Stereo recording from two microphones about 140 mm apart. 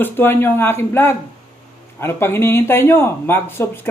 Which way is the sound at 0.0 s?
15° left (ahead or behind).